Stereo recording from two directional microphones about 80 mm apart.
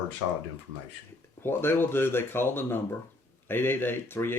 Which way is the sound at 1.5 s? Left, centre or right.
Left.